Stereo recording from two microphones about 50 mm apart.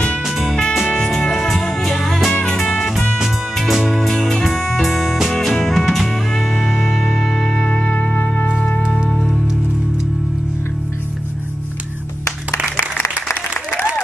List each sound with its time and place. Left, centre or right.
0.7 s music: centre
3.9 s music: centre; by 8.2 s left
9.1 s music: centre